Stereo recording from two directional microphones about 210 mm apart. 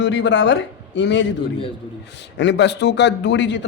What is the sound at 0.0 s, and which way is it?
A man's voice, 60° left (ahead or behind).